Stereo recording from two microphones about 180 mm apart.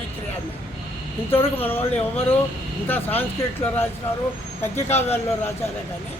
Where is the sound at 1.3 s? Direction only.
10° left (ahead or behind).